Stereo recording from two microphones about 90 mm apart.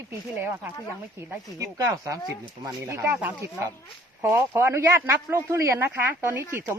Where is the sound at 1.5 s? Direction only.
40° right (ahead or behind).